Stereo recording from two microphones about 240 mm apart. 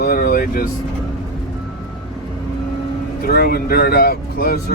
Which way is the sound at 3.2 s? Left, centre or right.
Left.